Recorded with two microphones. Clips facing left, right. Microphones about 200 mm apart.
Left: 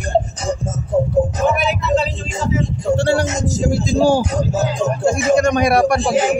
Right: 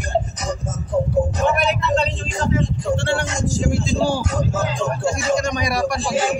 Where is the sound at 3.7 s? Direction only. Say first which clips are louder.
Left 8 dB; 40° left (ahead or behind).